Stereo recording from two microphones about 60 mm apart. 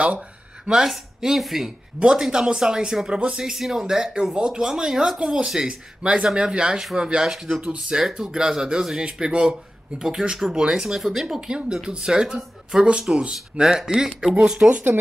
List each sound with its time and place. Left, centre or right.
0.7 s speech: centre
14.7 s speech: right